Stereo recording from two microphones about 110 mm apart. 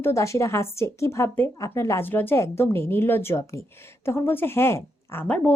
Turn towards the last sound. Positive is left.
turn(degrees=10)  # may be behind; listen again after turning